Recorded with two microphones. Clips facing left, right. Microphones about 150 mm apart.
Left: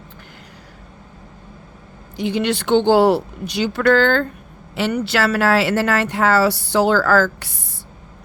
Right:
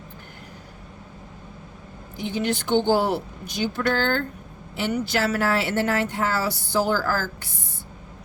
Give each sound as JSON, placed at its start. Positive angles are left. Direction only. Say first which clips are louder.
{"t": 2.1, "sound": "a woman's voice", "louder": "left 5 dB", "side_deg": 80}
{"t": 4.9, "sound": "speech", "louder": "left 4 dB", "side_deg": 75}